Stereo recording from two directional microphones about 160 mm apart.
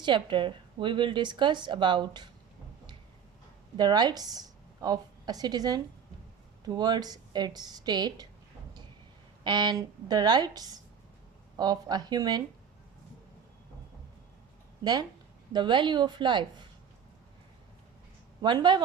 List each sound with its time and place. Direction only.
0.0 s a woman's voice: 30° right (ahead or behind)
3.8 s a woman's voice: 25° right (ahead or behind)
9.4 s a woman's voice: 25° right (ahead or behind)
15.5 s a woman's voice: 30° right (ahead or behind)
18.4 s a woman's voice: 30° right (ahead or behind)